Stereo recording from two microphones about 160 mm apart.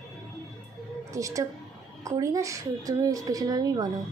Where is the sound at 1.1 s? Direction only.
20° right (ahead or behind).